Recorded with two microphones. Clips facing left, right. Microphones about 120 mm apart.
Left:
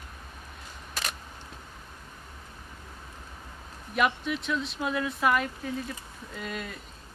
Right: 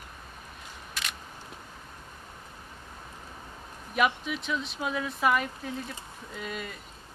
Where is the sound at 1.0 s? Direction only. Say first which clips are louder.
Left 3 dB; 40° left (ahead or behind).